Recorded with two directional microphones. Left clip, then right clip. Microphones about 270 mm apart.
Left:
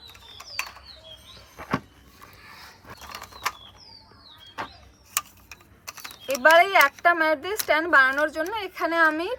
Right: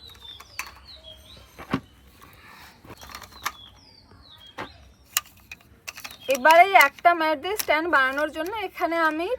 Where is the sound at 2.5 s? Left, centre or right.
Centre.